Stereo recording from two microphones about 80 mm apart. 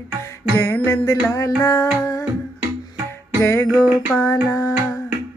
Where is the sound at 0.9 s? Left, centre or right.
Left.